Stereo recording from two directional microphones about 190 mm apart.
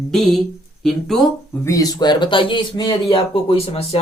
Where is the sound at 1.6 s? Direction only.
20° left (ahead or behind).